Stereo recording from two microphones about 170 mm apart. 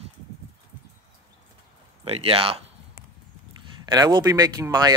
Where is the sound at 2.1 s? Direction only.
35° right (ahead or behind).